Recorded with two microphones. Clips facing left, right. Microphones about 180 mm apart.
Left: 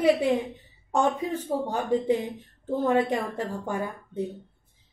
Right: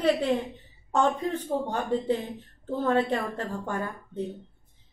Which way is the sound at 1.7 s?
10° left (ahead or behind).